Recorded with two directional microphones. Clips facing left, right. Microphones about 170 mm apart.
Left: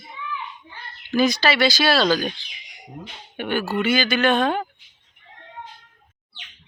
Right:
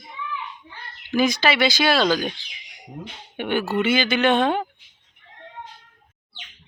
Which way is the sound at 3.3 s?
20° right (ahead or behind).